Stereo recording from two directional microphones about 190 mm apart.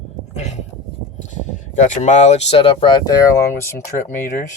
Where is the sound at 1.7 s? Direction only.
40° left (ahead or behind); by 4.1 s 15° left (ahead or behind).